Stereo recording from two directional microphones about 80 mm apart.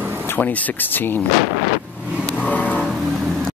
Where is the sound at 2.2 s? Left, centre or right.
Centre.